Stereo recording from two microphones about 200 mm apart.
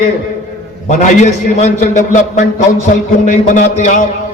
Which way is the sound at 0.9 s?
35° left (ahead or behind).